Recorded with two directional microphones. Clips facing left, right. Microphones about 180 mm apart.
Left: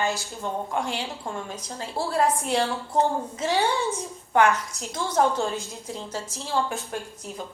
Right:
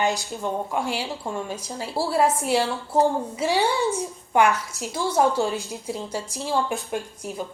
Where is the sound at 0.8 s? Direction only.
5° right (ahead or behind).